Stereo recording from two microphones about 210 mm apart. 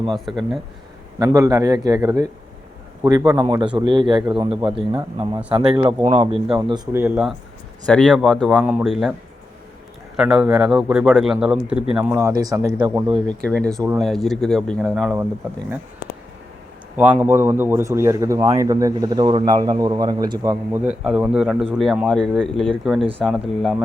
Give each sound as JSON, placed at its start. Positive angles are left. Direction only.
{"t": 0.3, "sound": "speech", "side_deg": 0}
{"t": 1.2, "sound": "speech", "side_deg": -15}
{"t": 10.2, "sound": "speech", "side_deg": -5}
{"t": 13.2, "sound": "speech", "side_deg": 5}
{"t": 17.0, "sound": "speech", "side_deg": -10}